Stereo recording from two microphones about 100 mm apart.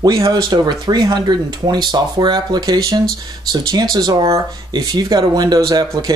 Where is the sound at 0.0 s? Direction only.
40° right (ahead or behind).